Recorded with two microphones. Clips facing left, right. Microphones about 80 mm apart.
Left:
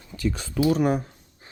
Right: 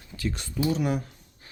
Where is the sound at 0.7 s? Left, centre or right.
Left.